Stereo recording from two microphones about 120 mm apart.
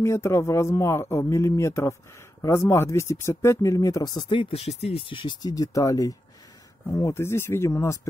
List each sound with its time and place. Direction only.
0.0 s speech: 20° left (ahead or behind)